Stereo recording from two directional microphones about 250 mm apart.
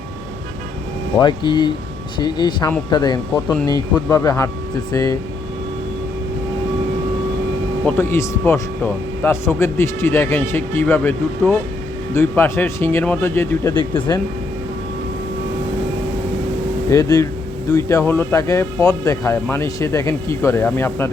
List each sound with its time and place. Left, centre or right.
1.2 s speech: centre
7.9 s speech: centre
16.9 s speech: centre